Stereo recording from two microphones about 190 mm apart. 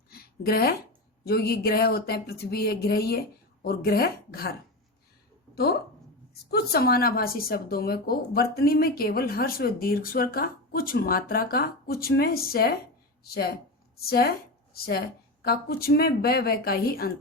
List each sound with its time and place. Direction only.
0.1 s a sound: 55° left (ahead or behind)
1.2 s speech: 55° left (ahead or behind)
6.5 s a woman's voice: 55° left (ahead or behind)